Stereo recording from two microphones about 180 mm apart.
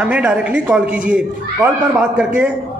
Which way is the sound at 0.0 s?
5° right (ahead or behind).